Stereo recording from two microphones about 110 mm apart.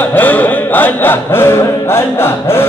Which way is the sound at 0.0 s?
15° left (ahead or behind).